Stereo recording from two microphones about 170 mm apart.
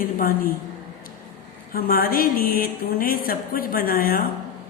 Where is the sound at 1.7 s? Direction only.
60° left (ahead or behind).